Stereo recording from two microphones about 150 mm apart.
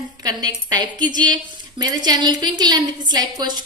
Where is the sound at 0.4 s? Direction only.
30° right (ahead or behind).